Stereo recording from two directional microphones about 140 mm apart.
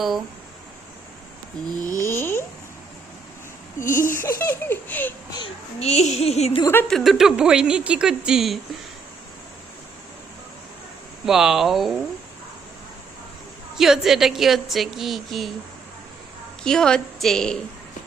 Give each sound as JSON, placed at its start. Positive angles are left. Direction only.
{"t": 1.8, "sound": "speech", "side_deg": 70}
{"t": 2.0, "sound": "speech", "side_deg": 15}
{"t": 3.8, "sound": "speech", "side_deg": 70}
{"t": 4.1, "sound": "speech", "side_deg": 15}
{"t": 5.8, "sound": "a sound", "side_deg": 50}
{"t": 6.8, "sound": "a woman's voice", "side_deg": 0}
{"t": 11.3, "sound": "a woman's voice", "side_deg": -5}
{"t": 13.7, "sound": "a woman's voice", "side_deg": 0}
{"t": 16.6, "sound": "a woman's voice", "side_deg": 5}